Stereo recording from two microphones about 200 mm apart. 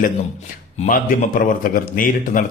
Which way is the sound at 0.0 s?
40° left (ahead or behind).